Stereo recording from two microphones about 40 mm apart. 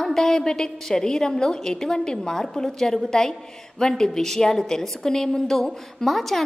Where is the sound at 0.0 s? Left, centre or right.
Centre.